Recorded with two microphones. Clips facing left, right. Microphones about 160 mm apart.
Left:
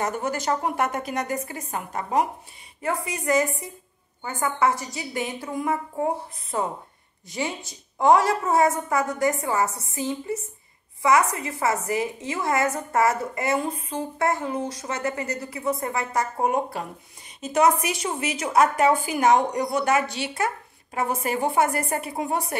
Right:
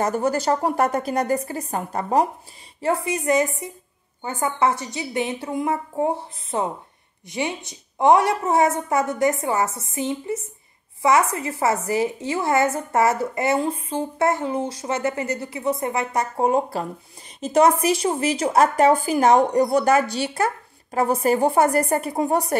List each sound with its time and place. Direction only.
0.0 s a woman's voice: 35° right (ahead or behind)